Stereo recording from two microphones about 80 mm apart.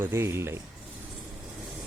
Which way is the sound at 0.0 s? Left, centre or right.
Right.